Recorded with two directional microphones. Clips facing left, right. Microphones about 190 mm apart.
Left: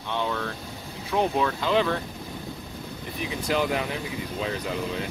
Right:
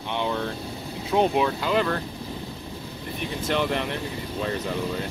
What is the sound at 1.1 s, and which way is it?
Speech, 20° right (ahead or behind).